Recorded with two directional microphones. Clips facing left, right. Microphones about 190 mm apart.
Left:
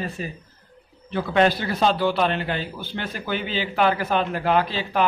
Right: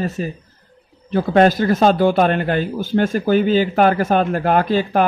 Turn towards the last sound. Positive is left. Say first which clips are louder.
# right 6 dB
turn(degrees=-50)  # may be behind; listen again after turning